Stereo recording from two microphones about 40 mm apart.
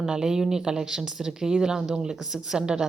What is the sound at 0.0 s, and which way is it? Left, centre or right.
A woman's voice, centre.